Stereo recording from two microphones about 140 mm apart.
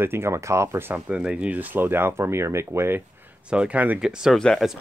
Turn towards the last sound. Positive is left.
turn(degrees=5)  # may be behind; listen again after turning